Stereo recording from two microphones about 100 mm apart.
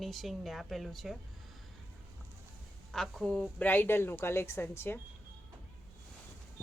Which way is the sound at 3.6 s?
20° left (ahead or behind).